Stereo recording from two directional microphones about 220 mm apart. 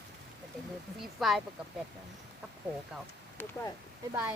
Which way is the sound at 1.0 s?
Centre (ahead or behind).